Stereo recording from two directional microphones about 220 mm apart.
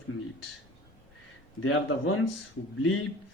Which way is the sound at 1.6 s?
65° left (ahead or behind).